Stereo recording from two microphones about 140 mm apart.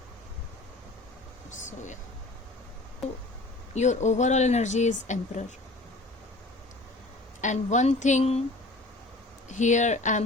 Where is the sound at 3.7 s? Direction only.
55° left (ahead or behind).